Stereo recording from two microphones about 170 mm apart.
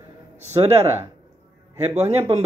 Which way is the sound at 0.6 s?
40° right (ahead or behind).